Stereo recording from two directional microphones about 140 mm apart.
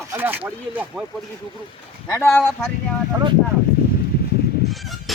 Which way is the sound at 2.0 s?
20° left (ahead or behind).